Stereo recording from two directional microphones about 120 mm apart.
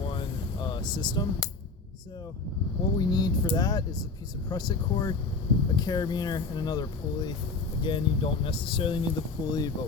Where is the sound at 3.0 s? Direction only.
35° left (ahead or behind).